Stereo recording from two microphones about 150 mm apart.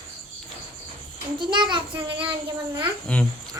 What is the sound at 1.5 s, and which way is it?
Speech, 30° right (ahead or behind).